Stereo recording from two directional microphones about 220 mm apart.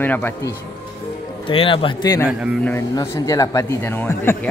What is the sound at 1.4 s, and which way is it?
Speech, 25° left (ahead or behind).